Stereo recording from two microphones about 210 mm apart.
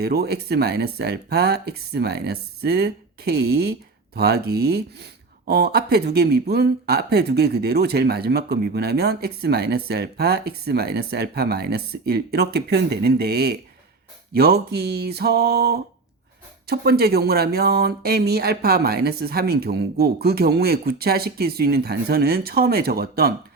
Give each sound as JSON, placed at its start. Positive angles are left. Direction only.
{"t": 0.0, "sound": "speech", "side_deg": -50}